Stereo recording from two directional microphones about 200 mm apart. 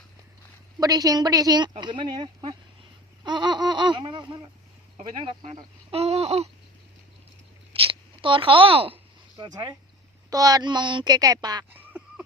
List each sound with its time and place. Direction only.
0.8 s speech: 20° right (ahead or behind)
3.2 s laughter: 20° right (ahead or behind)
5.2 s speech: 25° right (ahead or behind)
7.7 s a sound: 25° right (ahead or behind)
9.4 s speech: 20° right (ahead or behind)
11.7 s a sound: 10° right (ahead or behind)